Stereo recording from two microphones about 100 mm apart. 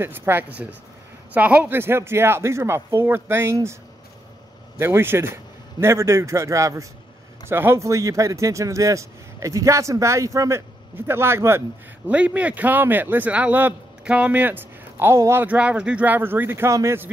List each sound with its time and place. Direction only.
0.0 s speech: 20° right (ahead or behind)
4.7 s speech: 25° right (ahead or behind)
12.1 s a man's voice: 15° right (ahead or behind)
15.4 s speech: 15° right (ahead or behind)